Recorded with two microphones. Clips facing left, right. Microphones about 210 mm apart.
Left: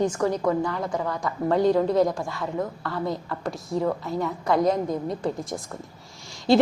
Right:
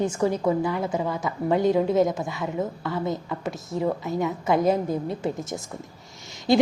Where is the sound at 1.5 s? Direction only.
20° right (ahead or behind).